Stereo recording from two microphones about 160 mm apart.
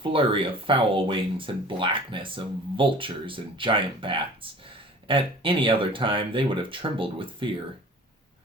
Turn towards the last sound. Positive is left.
turn(degrees=-35)  # may be behind; listen again after turning